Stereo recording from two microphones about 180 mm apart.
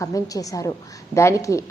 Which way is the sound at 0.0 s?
20° left (ahead or behind).